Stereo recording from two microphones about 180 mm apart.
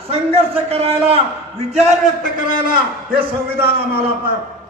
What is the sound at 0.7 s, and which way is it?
Speech, 35° right (ahead or behind).